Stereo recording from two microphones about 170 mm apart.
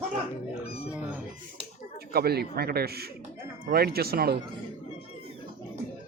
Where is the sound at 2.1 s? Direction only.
65° right (ahead or behind).